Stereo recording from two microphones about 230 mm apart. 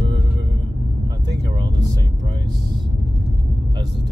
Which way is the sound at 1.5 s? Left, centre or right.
Centre.